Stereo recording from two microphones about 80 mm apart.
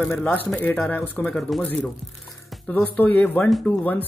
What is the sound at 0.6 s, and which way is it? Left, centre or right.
Speech, left.